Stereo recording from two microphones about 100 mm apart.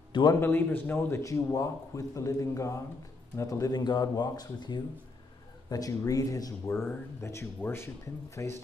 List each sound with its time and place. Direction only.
0.1 s a man's voice: 45° left (ahead or behind)
0.4 s a man's voice: 20° left (ahead or behind); by 4.8 s 45° left (ahead or behind)
5.7 s a man's voice: 35° left (ahead or behind)
6.7 s speech: 25° left (ahead or behind)